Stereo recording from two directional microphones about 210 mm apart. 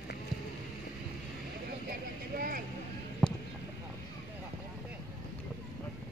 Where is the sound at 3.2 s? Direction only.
Centre (ahead or behind).